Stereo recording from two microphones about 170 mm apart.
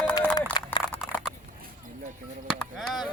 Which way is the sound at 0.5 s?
25° left (ahead or behind).